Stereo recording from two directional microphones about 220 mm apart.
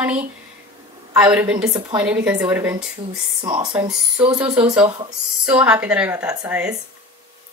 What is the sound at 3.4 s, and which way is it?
Speech, 25° right (ahead or behind).